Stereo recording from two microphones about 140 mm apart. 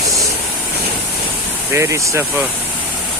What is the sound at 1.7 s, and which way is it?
Speech, 20° right (ahead or behind).